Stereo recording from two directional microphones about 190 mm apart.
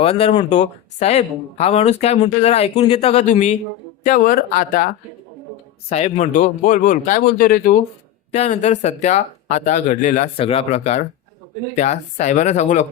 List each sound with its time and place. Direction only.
0.0 s a man's voice: 30° left (ahead or behind)
5.9 s a man's voice: 35° left (ahead or behind)